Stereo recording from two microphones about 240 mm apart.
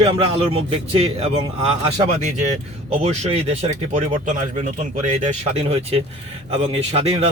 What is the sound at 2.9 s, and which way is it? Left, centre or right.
Speech, right.